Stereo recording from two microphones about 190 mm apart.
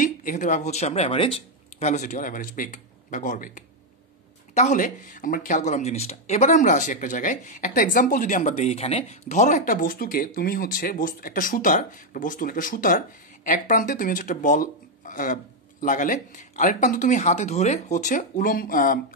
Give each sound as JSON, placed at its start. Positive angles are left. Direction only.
{"t": 0.0, "sound": "speech", "side_deg": 45}
{"t": 9.7, "sound": "speech", "side_deg": 50}